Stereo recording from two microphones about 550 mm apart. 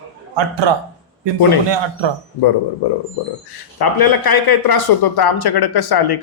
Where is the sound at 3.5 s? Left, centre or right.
Left.